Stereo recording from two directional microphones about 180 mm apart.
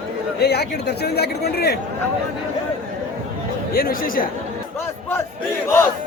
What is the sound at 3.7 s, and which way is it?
Speech, 55° left (ahead or behind).